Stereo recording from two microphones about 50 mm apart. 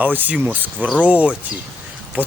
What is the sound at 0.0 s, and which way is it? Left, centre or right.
Speech, right.